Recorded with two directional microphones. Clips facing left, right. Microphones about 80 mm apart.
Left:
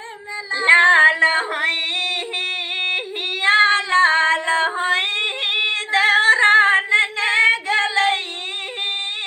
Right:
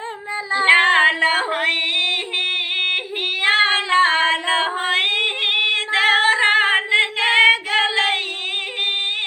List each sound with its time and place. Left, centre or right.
0.6 s female singing: left
3.4 s female singing: left